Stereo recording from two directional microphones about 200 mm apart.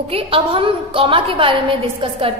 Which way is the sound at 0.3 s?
25° right (ahead or behind).